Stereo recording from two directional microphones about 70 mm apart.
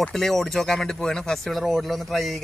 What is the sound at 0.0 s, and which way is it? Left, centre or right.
Speech, centre.